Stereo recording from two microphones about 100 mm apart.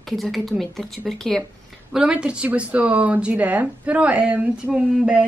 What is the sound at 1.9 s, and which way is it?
Speech, 5° right (ahead or behind).